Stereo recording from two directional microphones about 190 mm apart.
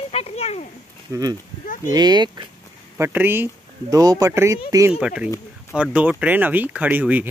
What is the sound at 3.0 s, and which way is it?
Speech, 10° right (ahead or behind).